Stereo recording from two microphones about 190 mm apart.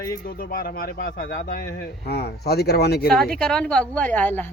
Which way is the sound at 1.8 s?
60° left (ahead or behind).